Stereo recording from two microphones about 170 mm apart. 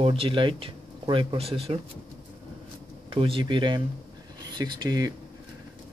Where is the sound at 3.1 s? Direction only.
30° right (ahead or behind).